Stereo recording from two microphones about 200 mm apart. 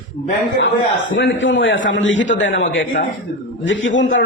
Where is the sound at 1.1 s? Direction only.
65° left (ahead or behind).